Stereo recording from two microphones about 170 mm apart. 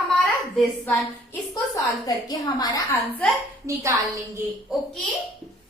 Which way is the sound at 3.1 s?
Centre (ahead or behind).